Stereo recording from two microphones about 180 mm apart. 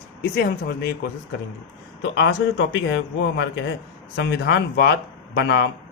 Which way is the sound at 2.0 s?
80° left.